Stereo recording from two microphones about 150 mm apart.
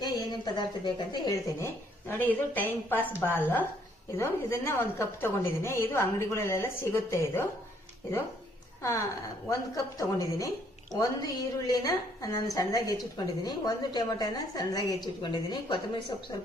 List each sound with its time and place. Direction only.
0.0 s a woman's voice: 30° left (ahead or behind)
1.6 s a woman's voice: 15° left (ahead or behind)
8.8 s a woman's voice: 20° left (ahead or behind)